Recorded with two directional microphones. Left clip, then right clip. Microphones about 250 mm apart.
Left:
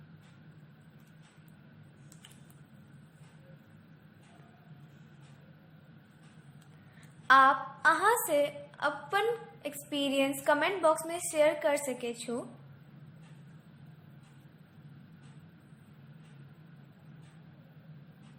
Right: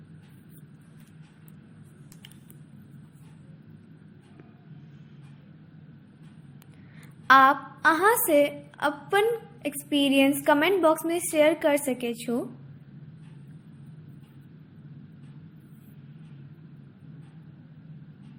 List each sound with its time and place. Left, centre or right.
7.3 s a woman's voice: right